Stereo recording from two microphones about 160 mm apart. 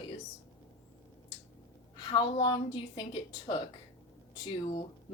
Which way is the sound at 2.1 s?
30° left (ahead or behind).